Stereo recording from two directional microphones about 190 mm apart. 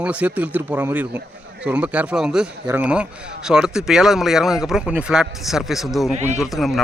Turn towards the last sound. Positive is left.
turn(degrees=0)  # may be behind; listen again after turning